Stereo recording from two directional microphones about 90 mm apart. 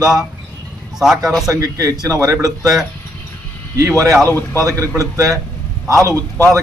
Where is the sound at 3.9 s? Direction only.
35° right (ahead or behind).